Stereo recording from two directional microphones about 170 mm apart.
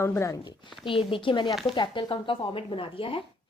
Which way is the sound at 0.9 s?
30° left (ahead or behind).